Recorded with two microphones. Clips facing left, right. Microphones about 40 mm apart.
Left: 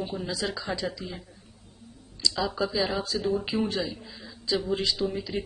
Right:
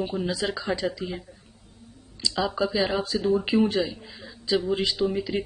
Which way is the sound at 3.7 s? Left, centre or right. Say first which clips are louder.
Right 4 dB; centre.